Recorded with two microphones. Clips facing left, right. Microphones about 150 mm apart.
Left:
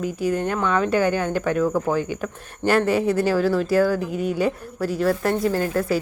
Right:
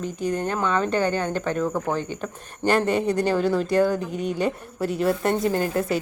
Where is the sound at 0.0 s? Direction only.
10° left (ahead or behind).